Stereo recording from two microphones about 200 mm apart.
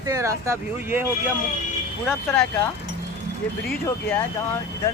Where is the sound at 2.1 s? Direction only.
5° left (ahead or behind).